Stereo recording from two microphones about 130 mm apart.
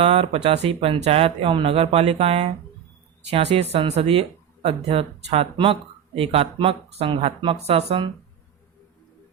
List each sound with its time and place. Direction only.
0.0 s speech: 45° right (ahead or behind)